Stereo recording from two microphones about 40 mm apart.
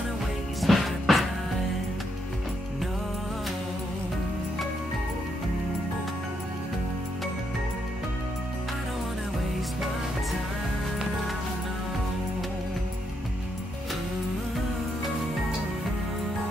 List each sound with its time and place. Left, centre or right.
0.6 s music: centre